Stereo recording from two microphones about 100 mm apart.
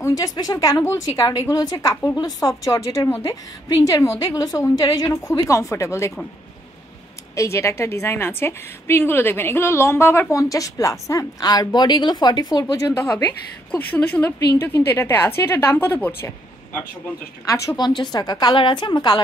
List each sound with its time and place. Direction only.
0.0 s a woman's voice: 40° left (ahead or behind)
7.3 s a woman's voice: 30° left (ahead or behind)
12.7 s a woman's voice: 30° left (ahead or behind)
17.6 s a woman's voice: 45° left (ahead or behind)